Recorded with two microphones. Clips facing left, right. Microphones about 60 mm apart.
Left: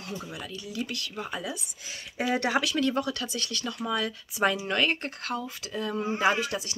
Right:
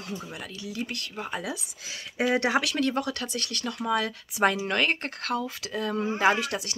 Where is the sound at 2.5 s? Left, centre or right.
Right.